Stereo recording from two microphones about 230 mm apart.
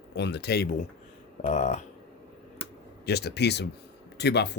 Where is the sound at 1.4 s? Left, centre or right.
Left.